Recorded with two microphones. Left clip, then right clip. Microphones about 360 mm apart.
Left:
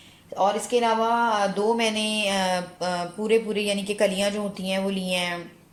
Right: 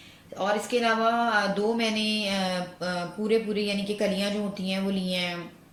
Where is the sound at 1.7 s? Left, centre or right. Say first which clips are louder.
Left 3 dB; centre.